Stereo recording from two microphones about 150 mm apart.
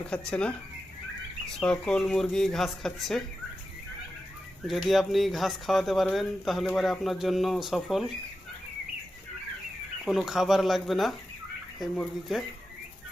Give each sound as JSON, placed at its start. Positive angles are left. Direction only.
{"t": 0.0, "sound": "speech", "side_deg": 10}
{"t": 1.5, "sound": "speech", "side_deg": 5}
{"t": 4.6, "sound": "speech", "side_deg": 0}
{"t": 10.1, "sound": "speech", "side_deg": 0}